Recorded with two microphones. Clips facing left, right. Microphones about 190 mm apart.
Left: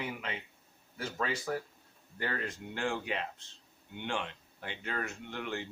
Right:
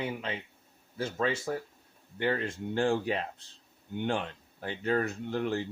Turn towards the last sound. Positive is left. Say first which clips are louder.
# right 8 dB
turn(degrees=-35)  # may be behind; listen again after turning